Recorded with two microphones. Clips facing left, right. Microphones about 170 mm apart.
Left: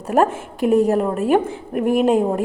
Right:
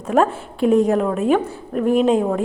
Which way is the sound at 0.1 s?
10° left (ahead or behind).